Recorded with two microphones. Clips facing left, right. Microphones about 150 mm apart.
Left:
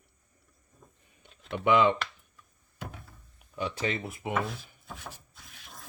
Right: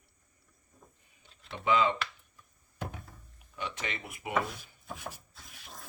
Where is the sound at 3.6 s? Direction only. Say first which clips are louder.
Left 7 dB; 35° left (ahead or behind).